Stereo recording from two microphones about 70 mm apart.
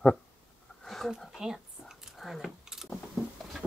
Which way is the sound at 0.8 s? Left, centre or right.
Centre.